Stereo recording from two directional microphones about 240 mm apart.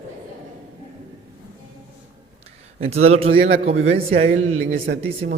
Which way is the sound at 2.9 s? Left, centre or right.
Right.